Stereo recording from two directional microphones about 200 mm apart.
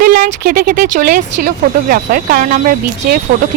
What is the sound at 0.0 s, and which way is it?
Speech, 45° right (ahead or behind).